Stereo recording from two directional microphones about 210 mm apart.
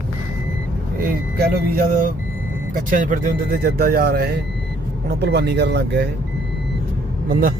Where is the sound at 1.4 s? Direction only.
50° right (ahead or behind).